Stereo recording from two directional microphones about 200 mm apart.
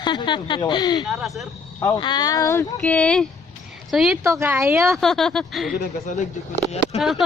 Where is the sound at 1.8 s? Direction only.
20° left (ahead or behind).